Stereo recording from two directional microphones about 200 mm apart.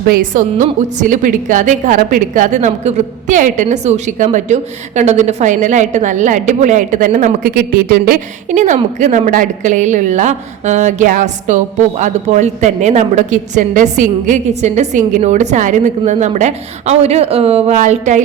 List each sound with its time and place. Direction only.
0.1 s a woman's voice: 40° right (ahead or behind)